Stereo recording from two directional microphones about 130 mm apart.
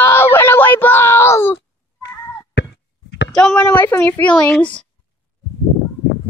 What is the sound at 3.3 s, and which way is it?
Speech, 5° left (ahead or behind).